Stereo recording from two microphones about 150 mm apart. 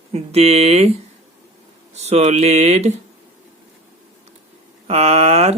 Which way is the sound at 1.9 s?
45° right (ahead or behind).